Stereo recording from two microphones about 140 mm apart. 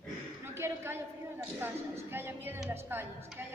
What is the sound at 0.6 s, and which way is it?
Speech, 20° right (ahead or behind).